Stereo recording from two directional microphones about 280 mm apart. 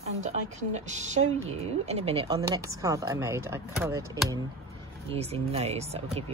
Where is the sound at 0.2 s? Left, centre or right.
Right.